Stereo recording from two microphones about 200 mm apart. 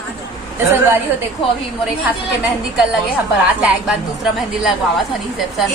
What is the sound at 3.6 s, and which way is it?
A woman's voice, 5° right (ahead or behind).